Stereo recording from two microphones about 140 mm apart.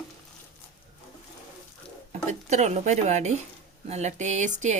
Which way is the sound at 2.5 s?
55° right (ahead or behind).